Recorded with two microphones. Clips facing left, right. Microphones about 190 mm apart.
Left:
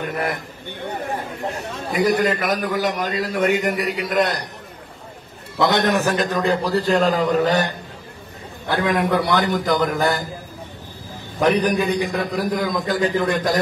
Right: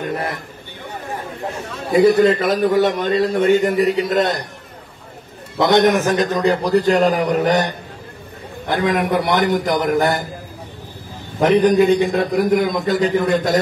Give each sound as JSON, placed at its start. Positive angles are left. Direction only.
{"t": 2.0, "sound": "a man's voice", "side_deg": -30}
{"t": 5.6, "sound": "a man's voice", "side_deg": -20}
{"t": 11.3, "sound": "a man's voice", "side_deg": -20}